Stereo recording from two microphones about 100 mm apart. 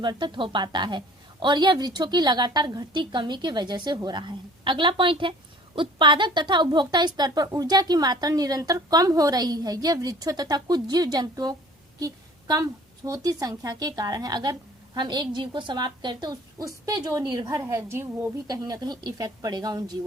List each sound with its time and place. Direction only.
0.0 s a woman's voice: 50° right (ahead or behind)
11.9 s a sound: 35° right (ahead or behind)
13.1 s a woman's voice: 35° right (ahead or behind)
18.4 s a woman's voice: 35° right (ahead or behind)